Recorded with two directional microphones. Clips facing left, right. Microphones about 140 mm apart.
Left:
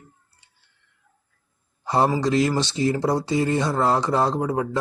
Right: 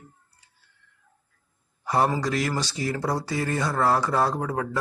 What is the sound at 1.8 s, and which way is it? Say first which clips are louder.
A man's voice: left 3 dB; 25° left (ahead or behind).